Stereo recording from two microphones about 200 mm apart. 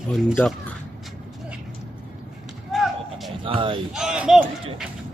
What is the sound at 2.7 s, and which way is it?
Basketball bounce, centre (ahead or behind).